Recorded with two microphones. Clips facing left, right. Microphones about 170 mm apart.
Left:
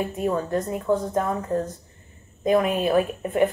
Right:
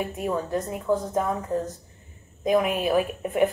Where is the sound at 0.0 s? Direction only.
Centre (ahead or behind).